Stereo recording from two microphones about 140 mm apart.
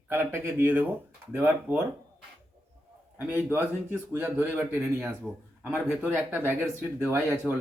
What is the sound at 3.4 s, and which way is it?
Speech, 15° right (ahead or behind).